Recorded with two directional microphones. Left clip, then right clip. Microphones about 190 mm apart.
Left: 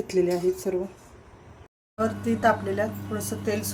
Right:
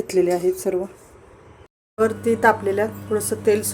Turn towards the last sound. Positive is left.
turn(degrees=-40)  # may be behind; listen again after turning